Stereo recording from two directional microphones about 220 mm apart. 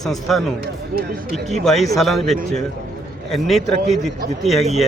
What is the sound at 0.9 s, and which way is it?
Speech, 40° right (ahead or behind).